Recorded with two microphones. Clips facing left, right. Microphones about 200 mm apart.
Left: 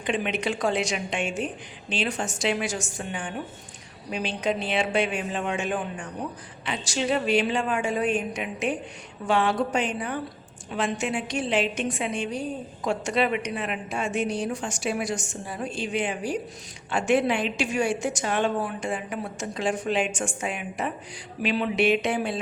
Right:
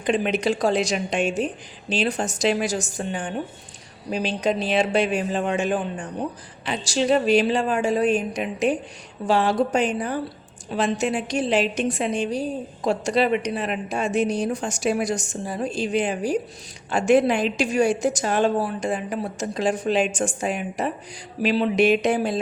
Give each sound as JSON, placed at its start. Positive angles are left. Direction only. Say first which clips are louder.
{"t": 0.0, "sound": "a woman's voice", "louder": "right 5 dB", "side_deg": -40}